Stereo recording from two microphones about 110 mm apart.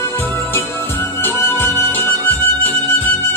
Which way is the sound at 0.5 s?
20° left (ahead or behind).